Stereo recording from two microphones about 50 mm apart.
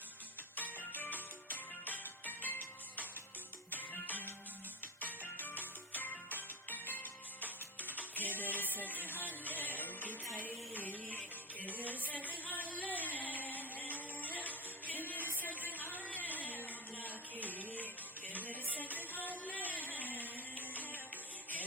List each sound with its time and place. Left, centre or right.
0.5 s music: left
11.6 s a sound: left
15.0 s music: left